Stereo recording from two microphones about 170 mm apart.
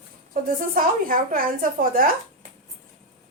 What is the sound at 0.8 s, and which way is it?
A woman's voice, 55° right (ahead or behind).